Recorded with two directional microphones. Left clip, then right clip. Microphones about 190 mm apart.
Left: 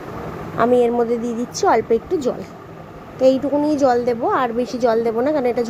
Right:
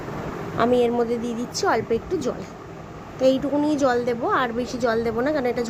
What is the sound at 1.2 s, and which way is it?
Speech, 15° left (ahead or behind).